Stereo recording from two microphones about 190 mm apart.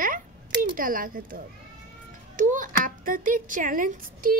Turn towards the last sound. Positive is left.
turn(degrees=-50)  # may be behind; listen again after turning